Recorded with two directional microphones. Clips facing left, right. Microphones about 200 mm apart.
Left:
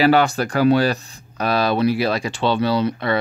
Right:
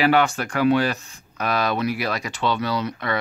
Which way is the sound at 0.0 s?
35° left (ahead or behind).